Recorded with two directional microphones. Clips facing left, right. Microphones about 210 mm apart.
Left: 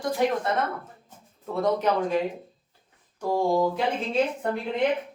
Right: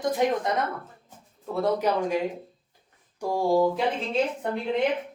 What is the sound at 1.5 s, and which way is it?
Speech, 10° right (ahead or behind).